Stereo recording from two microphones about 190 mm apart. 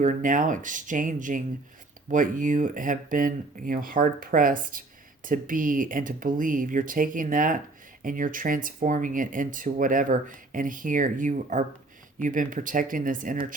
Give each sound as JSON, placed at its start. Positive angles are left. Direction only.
{"t": 0.0, "sound": "speech", "side_deg": -40}